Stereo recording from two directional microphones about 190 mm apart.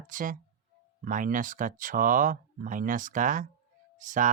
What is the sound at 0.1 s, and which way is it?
Speech, 45° right (ahead or behind).